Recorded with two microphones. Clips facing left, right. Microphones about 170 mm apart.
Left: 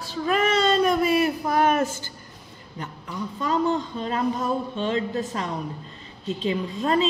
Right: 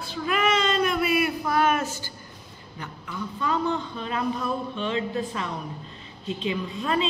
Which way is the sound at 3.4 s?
40° left (ahead or behind).